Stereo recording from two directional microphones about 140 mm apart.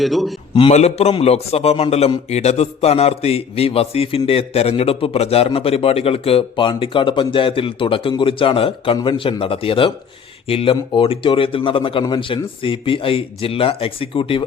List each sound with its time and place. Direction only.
0.0 s a man's voice: centre (ahead or behind)
0.5 s a man's voice: 45° left (ahead or behind)